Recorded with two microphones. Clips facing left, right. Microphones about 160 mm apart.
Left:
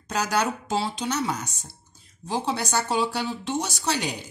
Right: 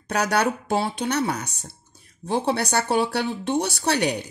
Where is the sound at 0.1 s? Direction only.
65° right (ahead or behind).